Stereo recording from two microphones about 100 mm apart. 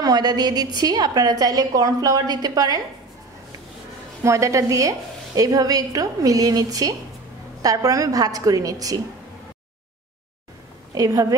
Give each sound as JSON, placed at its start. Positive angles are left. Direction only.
{"t": 0.0, "sound": "a woman's voice", "side_deg": -40}
{"t": 4.2, "sound": "a woman's voice", "side_deg": -30}
{"t": 11.0, "sound": "a woman's voice", "side_deg": -35}